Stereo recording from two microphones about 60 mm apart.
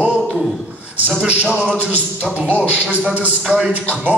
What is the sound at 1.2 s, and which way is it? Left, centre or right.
Speech, right.